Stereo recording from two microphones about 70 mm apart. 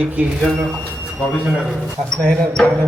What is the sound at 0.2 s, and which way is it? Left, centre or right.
Speech, right.